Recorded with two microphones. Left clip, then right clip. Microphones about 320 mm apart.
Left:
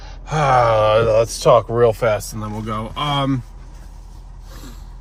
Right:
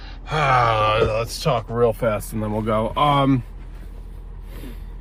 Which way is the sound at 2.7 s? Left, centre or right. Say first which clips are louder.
Right 4 dB; centre.